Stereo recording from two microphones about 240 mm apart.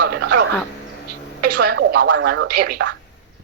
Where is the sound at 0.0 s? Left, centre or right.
Right.